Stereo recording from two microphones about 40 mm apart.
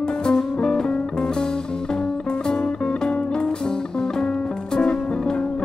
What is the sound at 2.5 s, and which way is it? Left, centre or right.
Music, centre.